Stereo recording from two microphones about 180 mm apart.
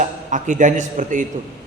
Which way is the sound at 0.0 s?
45° right (ahead or behind).